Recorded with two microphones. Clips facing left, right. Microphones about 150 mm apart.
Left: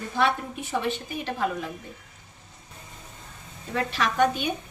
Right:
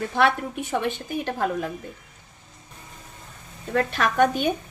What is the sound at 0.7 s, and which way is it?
A woman's voice, 50° right (ahead or behind).